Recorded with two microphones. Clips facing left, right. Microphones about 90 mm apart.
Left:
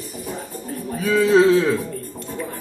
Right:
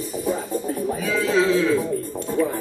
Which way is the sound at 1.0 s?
40° left (ahead or behind).